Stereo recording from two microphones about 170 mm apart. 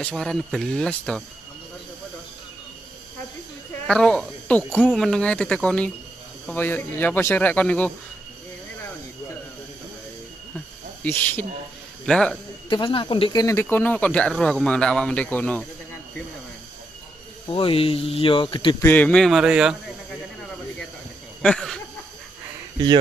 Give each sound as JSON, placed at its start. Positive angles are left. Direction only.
{"t": 0.0, "sound": "speech", "side_deg": 5}
{"t": 3.8, "sound": "speech", "side_deg": 5}
{"t": 11.1, "sound": "speech", "side_deg": 10}
{"t": 12.6, "sound": "speech", "side_deg": 30}
{"t": 17.5, "sound": "speech", "side_deg": 30}
{"t": 18.8, "sound": "speech", "side_deg": 10}
{"t": 21.4, "sound": "speech", "side_deg": 5}